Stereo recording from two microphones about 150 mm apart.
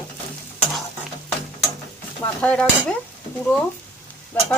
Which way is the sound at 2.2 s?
10° left (ahead or behind).